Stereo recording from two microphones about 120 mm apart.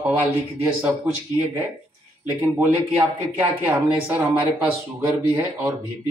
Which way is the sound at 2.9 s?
15° right (ahead or behind).